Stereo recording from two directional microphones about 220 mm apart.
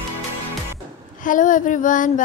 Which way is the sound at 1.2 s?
35° left (ahead or behind).